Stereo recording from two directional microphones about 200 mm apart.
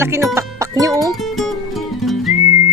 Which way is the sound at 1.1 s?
Centre (ahead or behind).